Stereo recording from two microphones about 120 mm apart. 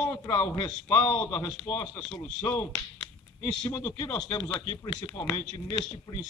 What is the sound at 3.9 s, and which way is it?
A man's voice, 30° left (ahead or behind).